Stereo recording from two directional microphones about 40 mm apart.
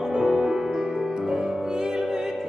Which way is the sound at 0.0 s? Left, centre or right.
Centre.